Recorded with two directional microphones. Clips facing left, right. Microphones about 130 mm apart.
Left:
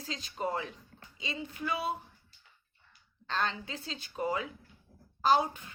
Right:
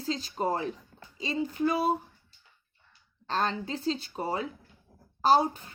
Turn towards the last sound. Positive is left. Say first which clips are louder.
# right 4 dB
turn(degrees=-35)  # may be behind; listen again after turning